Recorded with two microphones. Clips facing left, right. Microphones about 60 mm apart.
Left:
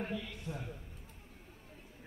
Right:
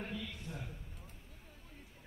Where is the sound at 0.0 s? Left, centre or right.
Left.